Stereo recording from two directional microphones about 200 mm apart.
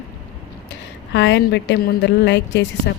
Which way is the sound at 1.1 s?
60° left (ahead or behind).